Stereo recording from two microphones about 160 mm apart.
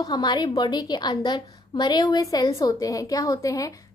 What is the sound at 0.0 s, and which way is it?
A woman's voice, 25° left (ahead or behind).